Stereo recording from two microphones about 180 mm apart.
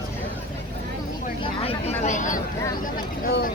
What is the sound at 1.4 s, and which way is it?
Vehicle, 30° left (ahead or behind).